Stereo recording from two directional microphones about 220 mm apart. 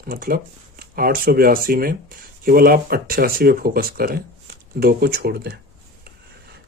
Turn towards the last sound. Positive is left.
turn(degrees=-45)  # may be behind; listen again after turning